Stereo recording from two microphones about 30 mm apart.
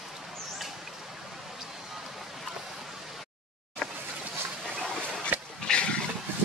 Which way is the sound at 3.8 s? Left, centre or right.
Centre.